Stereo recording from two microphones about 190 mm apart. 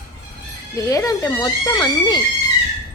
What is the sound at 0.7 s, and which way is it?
Speech, 15° left (ahead or behind).